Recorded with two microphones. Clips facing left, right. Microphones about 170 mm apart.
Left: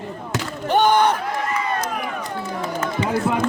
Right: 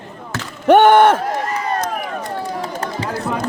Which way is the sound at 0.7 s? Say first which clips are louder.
Right 7 dB; 70° right (ahead or behind).